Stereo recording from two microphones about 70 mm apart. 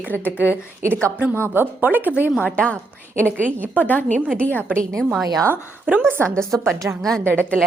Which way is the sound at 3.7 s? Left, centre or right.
Left.